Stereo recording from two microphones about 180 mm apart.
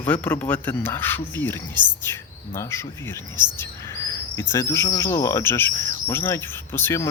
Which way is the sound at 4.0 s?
15° left (ahead or behind).